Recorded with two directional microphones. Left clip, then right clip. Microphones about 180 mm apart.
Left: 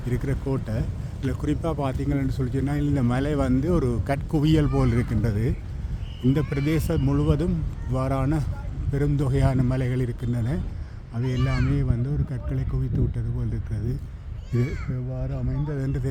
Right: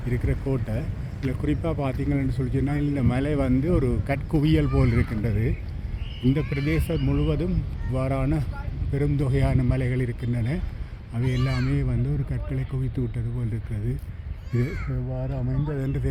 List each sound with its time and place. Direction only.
0.1 s a man's voice: 5° left (ahead or behind)
1.3 s a man's voice: 15° left (ahead or behind)
15.1 s a man's voice: 10° right (ahead or behind)